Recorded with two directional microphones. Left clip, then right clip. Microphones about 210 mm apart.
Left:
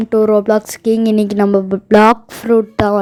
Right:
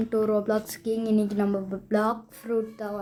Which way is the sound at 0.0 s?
35° left (ahead or behind).